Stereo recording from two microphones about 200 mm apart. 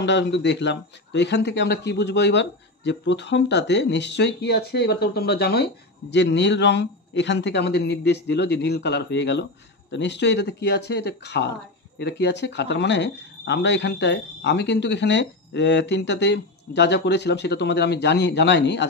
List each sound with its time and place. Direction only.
0.0 s speech: 60° left (ahead or behind)